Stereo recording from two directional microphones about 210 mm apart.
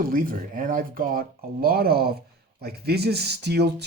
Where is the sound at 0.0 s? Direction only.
40° right (ahead or behind).